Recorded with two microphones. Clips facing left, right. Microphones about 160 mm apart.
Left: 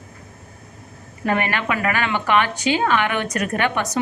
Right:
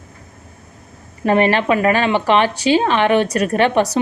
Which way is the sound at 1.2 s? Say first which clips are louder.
Right 7 dB; 25° right (ahead or behind).